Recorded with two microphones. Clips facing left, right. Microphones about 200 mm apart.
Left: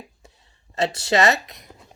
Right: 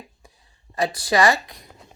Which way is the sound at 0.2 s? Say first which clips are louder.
Left 1 dB; 25° left (ahead or behind).